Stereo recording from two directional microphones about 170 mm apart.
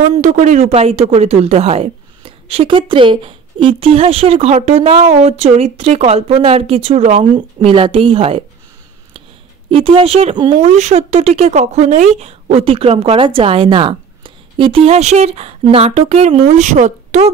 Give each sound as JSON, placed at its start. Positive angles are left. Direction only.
{"t": 0.2, "sound": "speech", "side_deg": -45}
{"t": 9.7, "sound": "speech", "side_deg": -30}
{"t": 10.6, "sound": "speech", "side_deg": -40}